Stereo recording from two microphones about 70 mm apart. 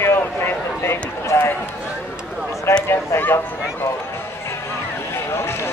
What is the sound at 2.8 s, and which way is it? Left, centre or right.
Speech, left.